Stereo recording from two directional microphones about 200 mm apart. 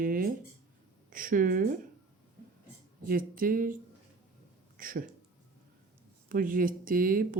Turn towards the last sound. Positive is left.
turn(degrees=-45)  # may be behind; listen again after turning